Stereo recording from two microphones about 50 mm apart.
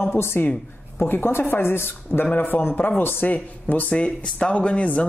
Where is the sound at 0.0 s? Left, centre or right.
Left.